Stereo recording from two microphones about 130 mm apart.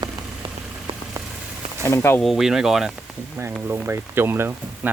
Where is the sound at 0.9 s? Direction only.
45° right (ahead or behind).